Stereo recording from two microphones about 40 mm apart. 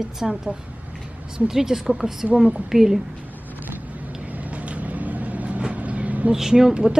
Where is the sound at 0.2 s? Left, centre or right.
Centre.